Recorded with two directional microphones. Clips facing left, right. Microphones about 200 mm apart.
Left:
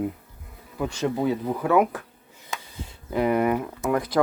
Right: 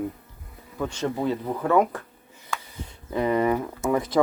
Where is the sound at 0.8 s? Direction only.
10° left (ahead or behind).